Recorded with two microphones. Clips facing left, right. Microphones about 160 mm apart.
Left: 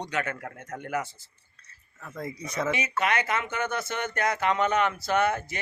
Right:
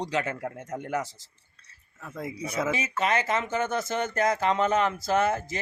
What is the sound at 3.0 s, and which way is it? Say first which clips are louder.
Speech: right 2 dB; 25° right (ahead or behind).